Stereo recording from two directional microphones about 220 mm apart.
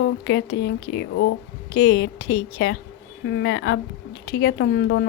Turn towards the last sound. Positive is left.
turn(degrees=50)  # may be behind; listen again after turning